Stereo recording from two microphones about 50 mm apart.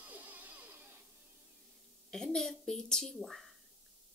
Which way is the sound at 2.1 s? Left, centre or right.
Centre.